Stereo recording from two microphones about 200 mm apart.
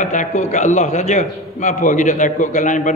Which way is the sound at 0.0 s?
40° left (ahead or behind).